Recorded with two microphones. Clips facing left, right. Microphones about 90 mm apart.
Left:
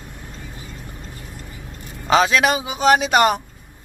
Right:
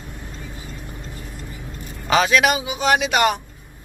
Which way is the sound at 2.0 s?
30° left (ahead or behind).